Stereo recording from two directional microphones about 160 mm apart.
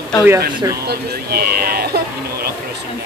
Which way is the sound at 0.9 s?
80° right.